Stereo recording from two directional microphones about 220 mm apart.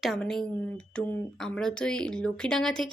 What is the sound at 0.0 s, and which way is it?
Speech, centre (ahead or behind).